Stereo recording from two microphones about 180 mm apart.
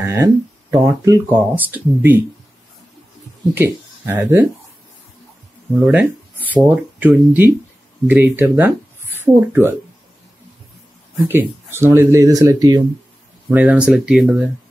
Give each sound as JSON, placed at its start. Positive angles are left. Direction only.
{"t": 0.0, "sound": "speech", "side_deg": -15}
{"t": 3.5, "sound": "speech", "side_deg": -10}
{"t": 5.9, "sound": "speech", "side_deg": -10}
{"t": 11.2, "sound": "speech", "side_deg": -15}
{"t": 13.5, "sound": "speech", "side_deg": -10}